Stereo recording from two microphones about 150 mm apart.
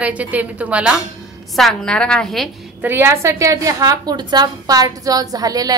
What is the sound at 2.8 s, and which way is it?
A woman's voice, 15° right (ahead or behind).